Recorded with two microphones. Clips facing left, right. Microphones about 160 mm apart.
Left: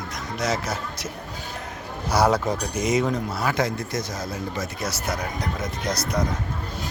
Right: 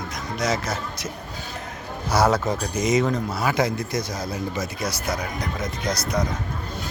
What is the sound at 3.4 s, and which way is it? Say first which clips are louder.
Speech: right 2 dB; 15° right (ahead or behind).